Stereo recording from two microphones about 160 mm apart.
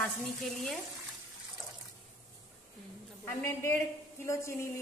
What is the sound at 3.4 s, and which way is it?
A woman's voice, 15° left (ahead or behind).